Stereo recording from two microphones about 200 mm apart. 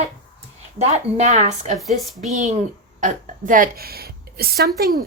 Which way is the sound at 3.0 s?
40° right (ahead or behind).